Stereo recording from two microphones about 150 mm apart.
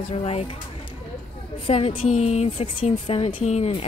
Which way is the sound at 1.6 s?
40° left (ahead or behind).